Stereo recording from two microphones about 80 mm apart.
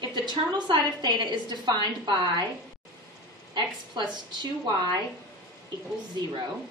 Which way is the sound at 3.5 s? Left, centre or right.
Right.